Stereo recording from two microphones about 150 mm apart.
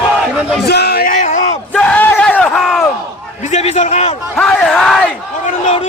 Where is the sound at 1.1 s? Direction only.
55° left (ahead or behind).